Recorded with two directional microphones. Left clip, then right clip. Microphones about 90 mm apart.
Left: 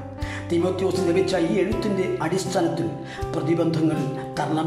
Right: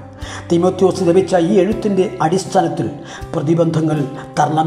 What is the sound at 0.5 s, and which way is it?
A man's voice, 20° right (ahead or behind).